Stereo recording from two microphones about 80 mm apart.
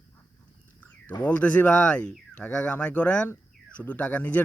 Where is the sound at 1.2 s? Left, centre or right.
Centre.